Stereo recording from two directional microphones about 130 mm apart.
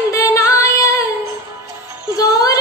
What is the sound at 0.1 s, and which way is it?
Female singing, 25° left (ahead or behind).